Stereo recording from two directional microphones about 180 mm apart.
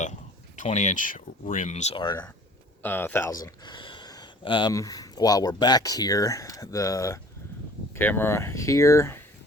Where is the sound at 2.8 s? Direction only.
10° left (ahead or behind).